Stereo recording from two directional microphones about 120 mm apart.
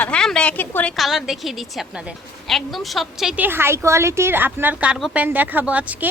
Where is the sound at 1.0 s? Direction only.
Centre (ahead or behind).